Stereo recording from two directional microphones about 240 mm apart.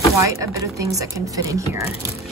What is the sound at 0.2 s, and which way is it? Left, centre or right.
Speech, centre.